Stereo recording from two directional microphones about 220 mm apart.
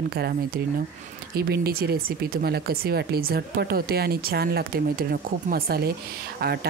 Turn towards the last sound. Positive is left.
turn(degrees=-45)  # may be behind; listen again after turning